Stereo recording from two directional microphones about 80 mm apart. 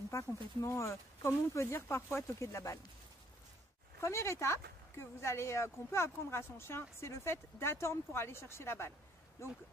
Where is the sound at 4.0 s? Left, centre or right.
Left.